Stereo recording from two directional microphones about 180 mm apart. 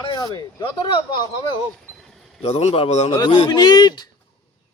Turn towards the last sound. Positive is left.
turn(degrees=20)  # may be behind; listen again after turning